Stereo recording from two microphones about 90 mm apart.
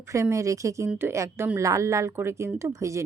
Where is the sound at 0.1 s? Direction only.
35° right (ahead or behind).